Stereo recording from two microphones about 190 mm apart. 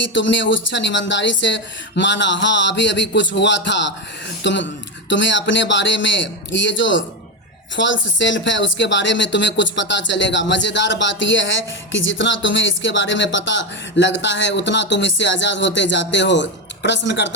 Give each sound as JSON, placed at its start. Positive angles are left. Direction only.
{"t": 0.1, "sound": "speech", "side_deg": 75}